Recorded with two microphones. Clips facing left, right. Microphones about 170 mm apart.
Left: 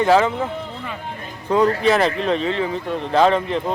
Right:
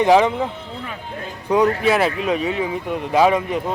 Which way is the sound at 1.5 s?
10° right (ahead or behind).